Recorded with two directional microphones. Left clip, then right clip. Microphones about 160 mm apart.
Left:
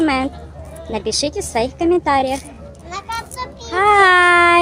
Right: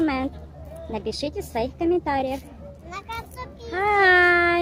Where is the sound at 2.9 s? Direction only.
35° right (ahead or behind).